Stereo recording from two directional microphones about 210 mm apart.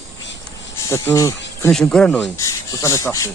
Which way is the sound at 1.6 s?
5° left (ahead or behind).